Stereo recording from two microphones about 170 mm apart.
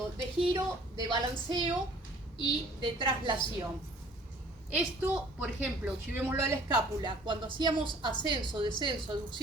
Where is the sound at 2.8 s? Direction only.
30° right (ahead or behind).